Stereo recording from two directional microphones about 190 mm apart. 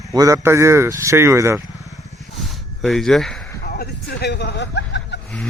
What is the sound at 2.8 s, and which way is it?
Speech, centre (ahead or behind).